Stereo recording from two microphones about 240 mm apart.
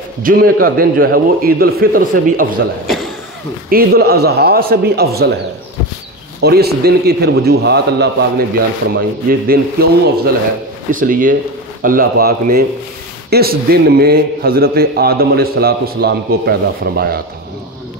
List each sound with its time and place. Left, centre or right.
0.2 s a man's voice: right
3.7 s a man's voice: right
6.4 s a man's voice: right